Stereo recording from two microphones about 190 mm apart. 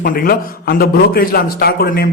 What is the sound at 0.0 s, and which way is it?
A man's voice, 50° left (ahead or behind).